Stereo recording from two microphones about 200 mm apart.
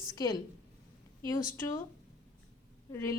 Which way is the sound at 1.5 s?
15° left (ahead or behind).